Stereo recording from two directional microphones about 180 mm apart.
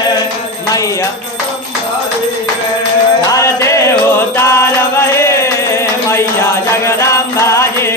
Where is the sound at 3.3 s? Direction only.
15° left (ahead or behind).